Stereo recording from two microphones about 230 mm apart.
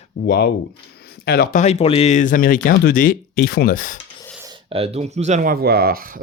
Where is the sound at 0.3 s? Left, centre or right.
Left.